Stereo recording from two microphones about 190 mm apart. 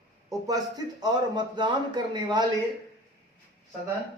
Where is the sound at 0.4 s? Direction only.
20° right (ahead or behind).